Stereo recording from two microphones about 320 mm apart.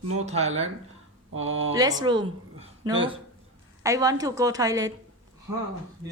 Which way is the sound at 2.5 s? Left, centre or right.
Centre.